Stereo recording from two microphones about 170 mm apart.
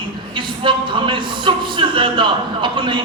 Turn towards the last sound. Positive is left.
turn(degrees=-30)  # may be behind; listen again after turning